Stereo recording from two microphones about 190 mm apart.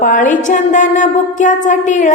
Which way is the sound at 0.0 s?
45° left (ahead or behind).